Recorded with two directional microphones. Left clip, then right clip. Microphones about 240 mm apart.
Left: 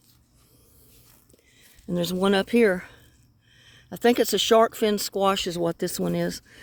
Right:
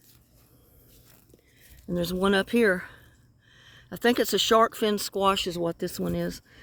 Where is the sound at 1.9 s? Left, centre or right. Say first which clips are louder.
Left 2 dB; centre.